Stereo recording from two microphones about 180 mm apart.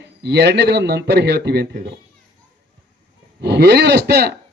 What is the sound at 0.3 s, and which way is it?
A man's voice, 70° right (ahead or behind).